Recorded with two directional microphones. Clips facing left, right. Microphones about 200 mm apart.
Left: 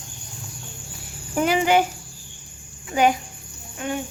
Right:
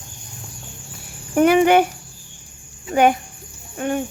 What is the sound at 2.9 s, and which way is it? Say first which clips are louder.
A child's voice: right 3 dB; 50° right (ahead or behind).